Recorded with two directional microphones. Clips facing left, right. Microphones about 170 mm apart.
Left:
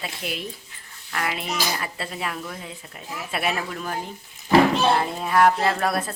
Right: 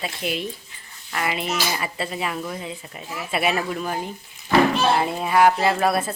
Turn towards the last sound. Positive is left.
turn(degrees=-5)  # may be behind; listen again after turning